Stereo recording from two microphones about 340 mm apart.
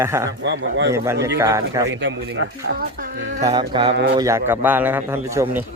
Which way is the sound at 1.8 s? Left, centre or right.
Right.